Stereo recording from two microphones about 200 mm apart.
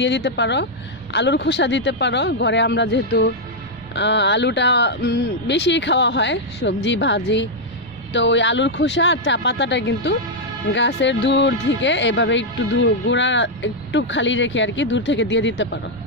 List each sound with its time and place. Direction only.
0.0 s speech: 60° left (ahead or behind)